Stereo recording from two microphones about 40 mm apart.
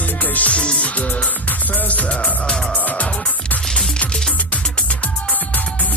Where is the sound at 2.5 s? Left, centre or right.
Centre.